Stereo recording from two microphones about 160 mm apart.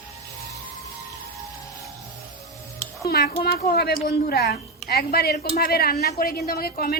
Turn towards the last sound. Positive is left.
turn(degrees=70)  # may be behind; listen again after turning